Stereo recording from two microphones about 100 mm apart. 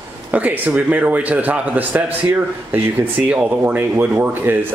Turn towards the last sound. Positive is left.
turn(degrees=-20)  # may be behind; listen again after turning